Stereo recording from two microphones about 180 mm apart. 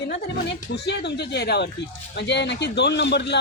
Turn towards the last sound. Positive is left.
turn(degrees=75)  # may be behind; listen again after turning